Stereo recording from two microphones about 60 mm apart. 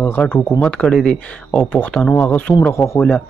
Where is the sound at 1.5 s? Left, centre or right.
Left.